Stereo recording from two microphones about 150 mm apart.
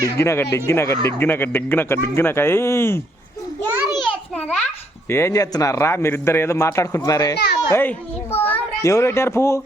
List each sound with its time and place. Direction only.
0.0 s speech: 20° left (ahead or behind)
4.0 s a sound: 10° left (ahead or behind)
5.0 s speech: 15° left (ahead or behind)
7.7 s a child's voice: 15° left (ahead or behind)